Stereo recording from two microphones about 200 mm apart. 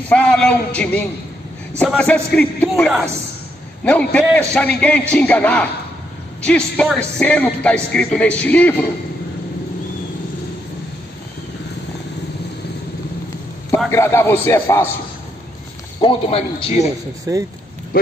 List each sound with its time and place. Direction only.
0.1 s a man's voice: 5° left (ahead or behind)
13.8 s speech: 10° left (ahead or behind)
16.0 s a man's voice: 25° left (ahead or behind)
17.3 s speech: 20° right (ahead or behind)